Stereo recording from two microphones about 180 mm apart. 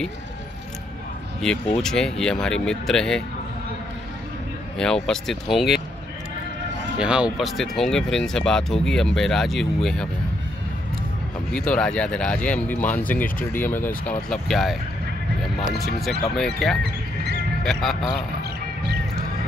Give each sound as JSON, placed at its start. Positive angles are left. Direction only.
{"t": 1.8, "sound": "speech", "side_deg": 5}
{"t": 4.7, "sound": "speech", "side_deg": 5}
{"t": 7.0, "sound": "speech", "side_deg": -5}
{"t": 11.5, "sound": "speech", "side_deg": 5}
{"t": 16.0, "sound": "speech", "side_deg": 0}
{"t": 16.8, "sound": "music", "side_deg": -65}
{"t": 17.6, "sound": "speech", "side_deg": 0}